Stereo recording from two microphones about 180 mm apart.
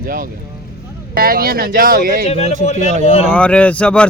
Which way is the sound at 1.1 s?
55° right (ahead or behind).